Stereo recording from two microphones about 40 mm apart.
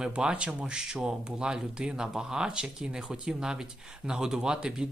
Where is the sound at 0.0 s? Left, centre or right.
Right.